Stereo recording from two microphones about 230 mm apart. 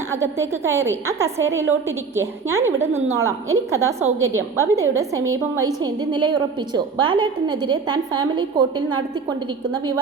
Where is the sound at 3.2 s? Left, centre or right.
Right.